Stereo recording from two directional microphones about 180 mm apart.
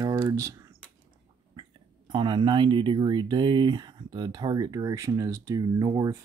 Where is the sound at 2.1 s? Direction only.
25° right (ahead or behind).